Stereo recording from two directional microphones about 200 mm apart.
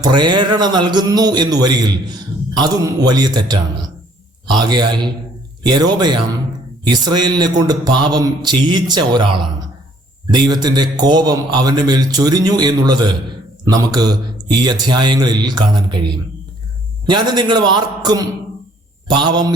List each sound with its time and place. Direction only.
0.0 s a man's voice: 20° right (ahead or behind)
17.1 s a man's voice: 20° right (ahead or behind)